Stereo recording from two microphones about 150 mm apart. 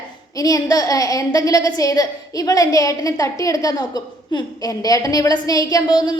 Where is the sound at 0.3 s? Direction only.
25° left (ahead or behind).